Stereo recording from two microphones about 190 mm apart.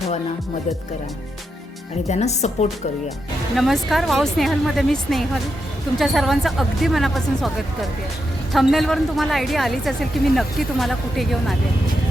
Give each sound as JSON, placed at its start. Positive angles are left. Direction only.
{"t": 2.0, "sound": "a woman's voice", "side_deg": 35}
{"t": 3.5, "sound": "speech", "side_deg": 0}